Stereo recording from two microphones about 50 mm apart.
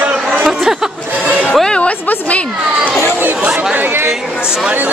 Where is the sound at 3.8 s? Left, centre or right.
Right.